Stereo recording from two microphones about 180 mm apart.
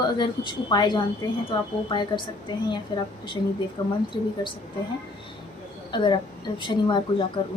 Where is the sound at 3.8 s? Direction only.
25° left (ahead or behind).